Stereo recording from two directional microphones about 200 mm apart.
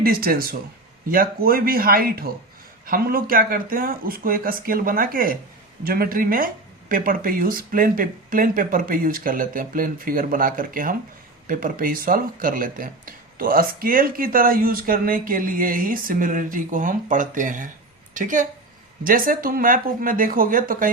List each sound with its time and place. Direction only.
0.0 s a woman's voice: 50° right (ahead or behind)